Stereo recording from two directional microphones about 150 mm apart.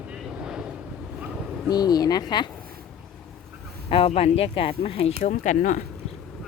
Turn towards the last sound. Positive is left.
turn(degrees=60)  # may be behind; listen again after turning